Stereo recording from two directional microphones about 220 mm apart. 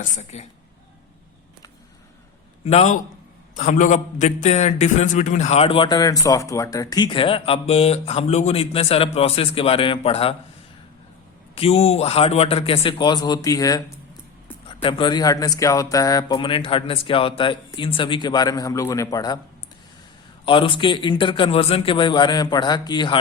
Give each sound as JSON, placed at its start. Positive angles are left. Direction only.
{"t": 0.0, "sound": "a woman's voice", "side_deg": 30}
{"t": 2.6, "sound": "a woman's voice", "side_deg": 30}
{"t": 11.5, "sound": "a man's voice", "side_deg": 25}
{"t": 20.4, "sound": "a man's voice", "side_deg": 25}